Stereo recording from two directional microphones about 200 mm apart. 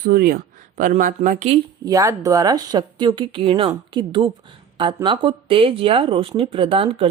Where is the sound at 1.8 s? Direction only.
15° right (ahead or behind).